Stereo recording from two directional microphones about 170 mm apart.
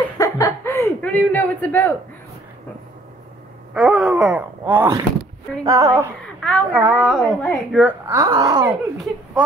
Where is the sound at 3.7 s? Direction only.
Centre (ahead or behind); by 6.1 s 15° right (ahead or behind).